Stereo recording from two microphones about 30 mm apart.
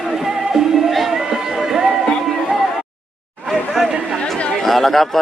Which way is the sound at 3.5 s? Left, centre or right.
Centre.